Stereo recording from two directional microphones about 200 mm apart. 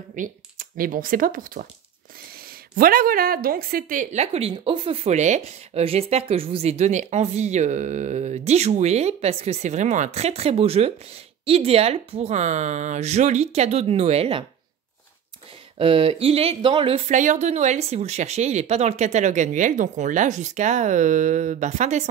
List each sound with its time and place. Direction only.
0.1 s speech: 45° right (ahead or behind)
2.7 s a woman's voice: 45° right (ahead or behind); by 14.4 s 30° right (ahead or behind)
15.8 s speech: 25° right (ahead or behind)
17.1 s a woman's voice: 40° right (ahead or behind)